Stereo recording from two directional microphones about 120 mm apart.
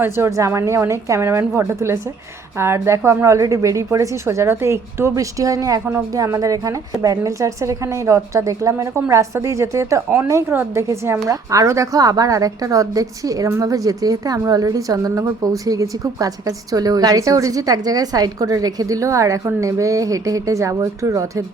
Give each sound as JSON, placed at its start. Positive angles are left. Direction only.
{"t": 0.0, "sound": "a woman's voice", "side_deg": -25}